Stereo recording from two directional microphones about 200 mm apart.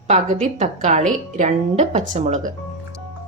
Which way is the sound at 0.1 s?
35° right (ahead or behind).